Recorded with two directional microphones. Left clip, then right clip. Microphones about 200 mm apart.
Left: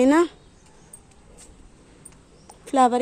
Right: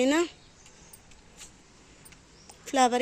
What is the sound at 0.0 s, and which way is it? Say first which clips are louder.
Speech: left 7 dB; 15° left (ahead or behind).